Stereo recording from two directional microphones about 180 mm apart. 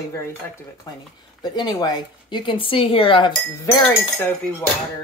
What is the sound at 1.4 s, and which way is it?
A woman's voice, 20° left (ahead or behind).